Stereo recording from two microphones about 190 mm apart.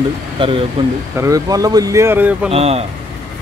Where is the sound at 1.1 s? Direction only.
15° right (ahead or behind).